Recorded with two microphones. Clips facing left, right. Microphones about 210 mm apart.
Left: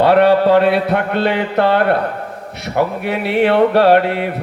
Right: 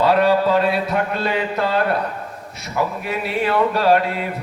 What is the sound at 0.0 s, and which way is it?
Mantra, 65° left (ahead or behind).